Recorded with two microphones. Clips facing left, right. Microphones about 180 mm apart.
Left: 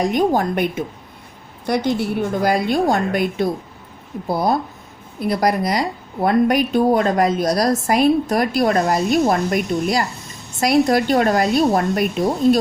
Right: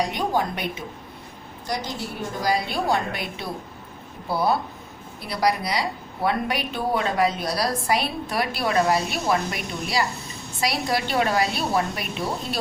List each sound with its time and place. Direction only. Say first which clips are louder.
0.0 s a woman's voice: left 7 dB; 45° left (ahead or behind)
1.6 s a woman's voice: left 10 dB; 60° left (ahead or behind)